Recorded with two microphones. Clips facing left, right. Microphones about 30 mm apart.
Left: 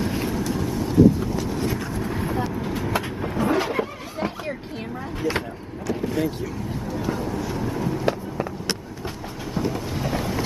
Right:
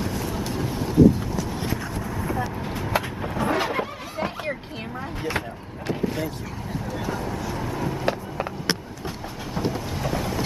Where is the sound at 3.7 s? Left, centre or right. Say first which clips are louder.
Left 1 dB; right.